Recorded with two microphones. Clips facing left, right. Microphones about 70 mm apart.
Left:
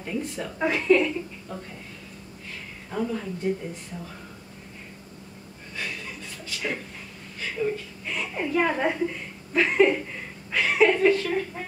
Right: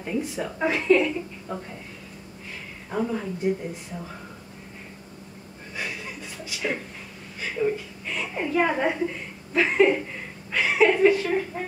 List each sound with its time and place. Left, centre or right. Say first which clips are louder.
0.0 s speech: right 2 dB; centre
1.5 s a woman's voice: right 5 dB; centre
2.9 s a woman's voice: right 2 dB; centre
5.8 s chuckle: right 1 dB; centre
7.3 s a sound: right 2 dB; centre
8.0 s chuckle: left 1 dB; centre